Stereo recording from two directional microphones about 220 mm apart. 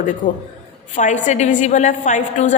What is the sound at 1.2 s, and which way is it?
A woman's voice, 35° left (ahead or behind).